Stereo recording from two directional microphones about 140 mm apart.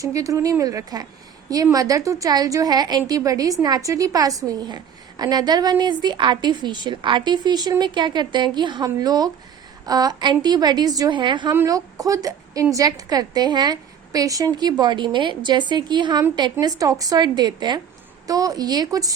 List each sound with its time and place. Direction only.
0.0 s a woman's voice: 25° right (ahead or behind)
11.5 s a woman's voice: 20° right (ahead or behind)